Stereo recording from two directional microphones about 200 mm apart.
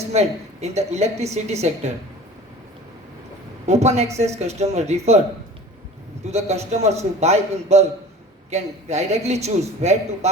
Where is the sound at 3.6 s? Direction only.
35° right (ahead or behind).